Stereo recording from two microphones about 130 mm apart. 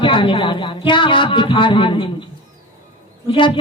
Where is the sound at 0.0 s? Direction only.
40° left (ahead or behind).